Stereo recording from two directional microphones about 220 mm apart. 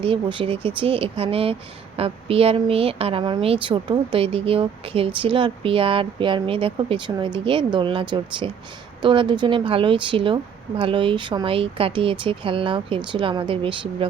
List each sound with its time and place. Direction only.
0.0 s a woman's voice: 25° right (ahead or behind)